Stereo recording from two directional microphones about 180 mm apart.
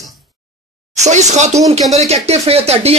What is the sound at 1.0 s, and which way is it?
Speech, 40° right (ahead or behind).